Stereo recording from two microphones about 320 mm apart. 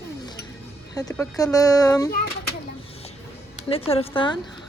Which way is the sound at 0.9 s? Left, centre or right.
Centre.